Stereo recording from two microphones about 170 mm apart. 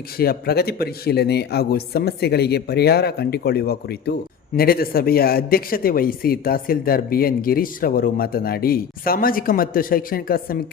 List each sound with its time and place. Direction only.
0.2 s a man's voice: 65° left (ahead or behind)